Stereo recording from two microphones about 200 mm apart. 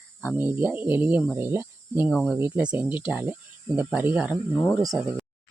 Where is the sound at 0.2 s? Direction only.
10° right (ahead or behind).